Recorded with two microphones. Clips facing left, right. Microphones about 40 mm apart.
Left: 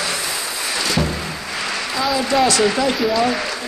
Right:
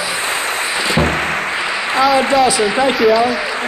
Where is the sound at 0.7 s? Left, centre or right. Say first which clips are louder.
Right 2 dB; right.